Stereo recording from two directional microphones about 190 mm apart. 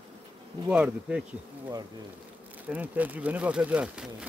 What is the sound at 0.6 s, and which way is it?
Speech, 5° right (ahead or behind).